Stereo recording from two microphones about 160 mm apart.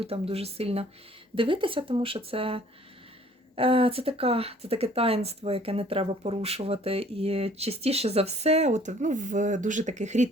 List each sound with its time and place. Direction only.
0.0 s speech: 40° right (ahead or behind)